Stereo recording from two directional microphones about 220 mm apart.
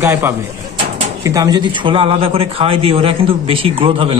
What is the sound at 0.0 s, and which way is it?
A man's voice, 10° right (ahead or behind).